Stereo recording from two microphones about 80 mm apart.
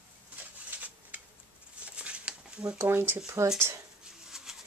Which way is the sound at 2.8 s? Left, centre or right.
Right.